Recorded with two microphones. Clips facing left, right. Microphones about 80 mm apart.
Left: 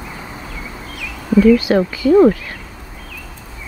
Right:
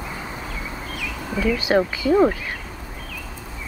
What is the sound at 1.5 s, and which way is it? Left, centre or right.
Speech, right.